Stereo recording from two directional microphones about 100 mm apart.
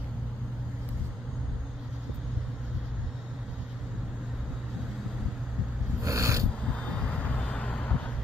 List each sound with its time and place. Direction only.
6.0 s filing: 35° right (ahead or behind)
6.7 s vehicle: 10° left (ahead or behind)